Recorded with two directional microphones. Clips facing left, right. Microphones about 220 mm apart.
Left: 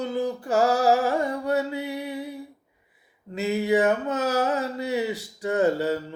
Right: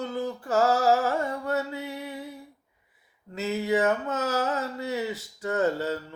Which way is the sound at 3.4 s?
15° left (ahead or behind).